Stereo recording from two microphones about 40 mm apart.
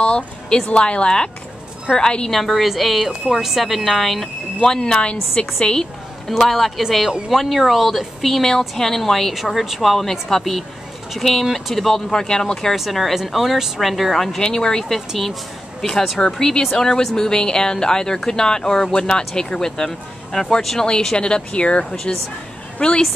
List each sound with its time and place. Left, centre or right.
0.0 s a sound: left
0.7 s speech: left
2.3 s speech: centre
4.6 s speech: left
6.3 s speech: centre
12.9 s speech: centre
14.4 s speech: centre
15.0 s speech: centre; by 23.0 s left